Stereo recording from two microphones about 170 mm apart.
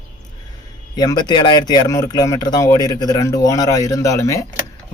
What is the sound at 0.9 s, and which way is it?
Speech, 25° left (ahead or behind).